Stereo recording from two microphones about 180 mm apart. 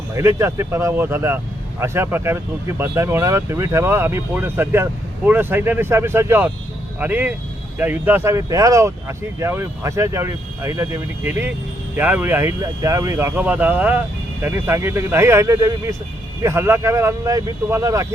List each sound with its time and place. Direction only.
0.1 s speech: 15° right (ahead or behind)